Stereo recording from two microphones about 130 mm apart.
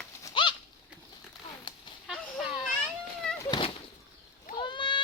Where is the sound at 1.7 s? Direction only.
35° left (ahead or behind).